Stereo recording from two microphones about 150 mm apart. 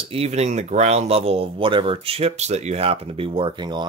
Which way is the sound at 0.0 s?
40° right (ahead or behind).